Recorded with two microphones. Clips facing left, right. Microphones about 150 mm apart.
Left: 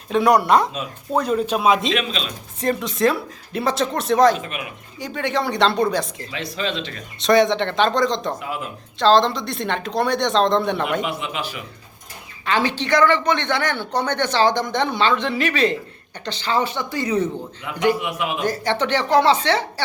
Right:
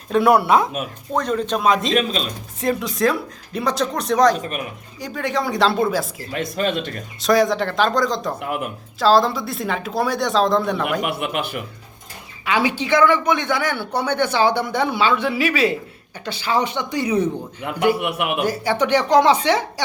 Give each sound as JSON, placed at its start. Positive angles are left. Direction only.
{"t": 0.1, "sound": "speech", "side_deg": -5}
{"t": 1.1, "sound": "speech", "side_deg": 10}
{"t": 1.9, "sound": "speech", "side_deg": -40}
{"t": 2.6, "sound": "speech", "side_deg": 0}
{"t": 4.4, "sound": "speech", "side_deg": -40}
{"t": 4.9, "sound": "speech", "side_deg": 0}
{"t": 6.3, "sound": "speech", "side_deg": -50}
{"t": 7.2, "sound": "speech", "side_deg": 0}
{"t": 8.4, "sound": "speech", "side_deg": -60}
{"t": 9.0, "sound": "speech", "side_deg": -5}
{"t": 11.0, "sound": "speech", "side_deg": -60}
{"t": 12.5, "sound": "speech", "side_deg": -10}
{"t": 17.6, "sound": "speech", "side_deg": -60}
{"t": 18.4, "sound": "speech", "side_deg": -10}